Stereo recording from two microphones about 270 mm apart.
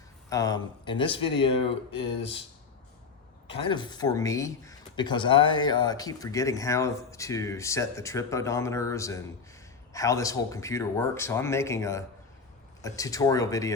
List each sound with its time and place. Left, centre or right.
0.3 s speech: centre
3.5 s speech: centre